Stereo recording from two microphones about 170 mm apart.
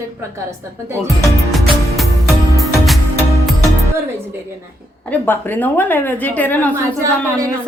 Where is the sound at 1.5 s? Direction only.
Centre (ahead or behind).